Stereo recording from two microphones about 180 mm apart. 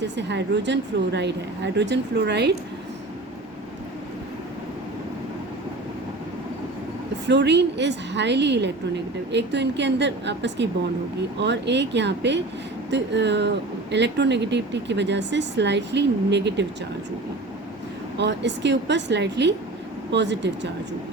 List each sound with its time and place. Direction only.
0.0 s speech: 75° right (ahead or behind)
7.3 s speech: 70° right (ahead or behind)
18.2 s speech: 75° right (ahead or behind)